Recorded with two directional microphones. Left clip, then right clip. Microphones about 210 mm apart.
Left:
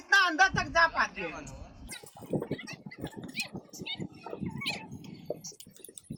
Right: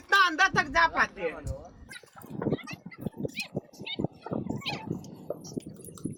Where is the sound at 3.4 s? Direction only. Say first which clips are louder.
Right 1 dB; 5° right (ahead or behind).